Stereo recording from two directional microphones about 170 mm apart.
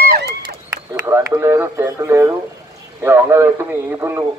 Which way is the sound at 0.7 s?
15° right (ahead or behind).